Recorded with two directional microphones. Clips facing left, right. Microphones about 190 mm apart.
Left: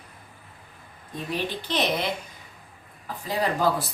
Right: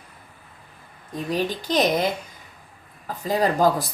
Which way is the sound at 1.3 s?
40° right (ahead or behind).